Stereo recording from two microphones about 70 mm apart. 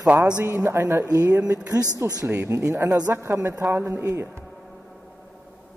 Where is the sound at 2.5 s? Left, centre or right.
Right.